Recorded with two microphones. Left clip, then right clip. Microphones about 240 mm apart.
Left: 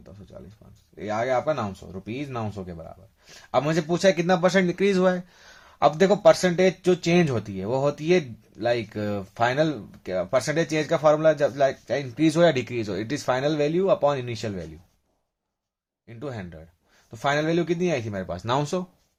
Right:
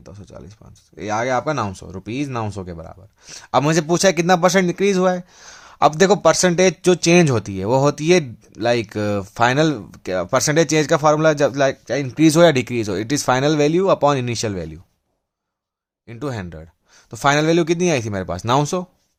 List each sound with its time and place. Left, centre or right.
0.0 s speech: right
16.0 s speech: right